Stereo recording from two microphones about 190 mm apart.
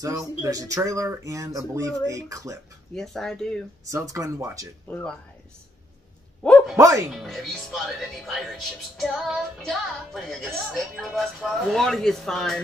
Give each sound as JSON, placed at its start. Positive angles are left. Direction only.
{"t": 0.0, "sound": "speech", "side_deg": -20}
{"t": 2.9, "sound": "speech", "side_deg": 0}
{"t": 3.8, "sound": "speech", "side_deg": -15}
{"t": 4.8, "sound": "speech", "side_deg": 10}
{"t": 6.4, "sound": "speech", "side_deg": 0}
{"t": 6.8, "sound": "speech", "side_deg": -15}
{"t": 7.1, "sound": "speech", "side_deg": 0}